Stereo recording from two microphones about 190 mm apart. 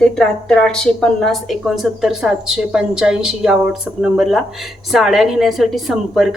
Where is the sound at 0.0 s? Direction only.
5° left (ahead or behind).